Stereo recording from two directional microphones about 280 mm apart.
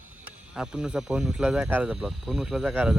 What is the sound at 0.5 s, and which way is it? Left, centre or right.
Speech, centre.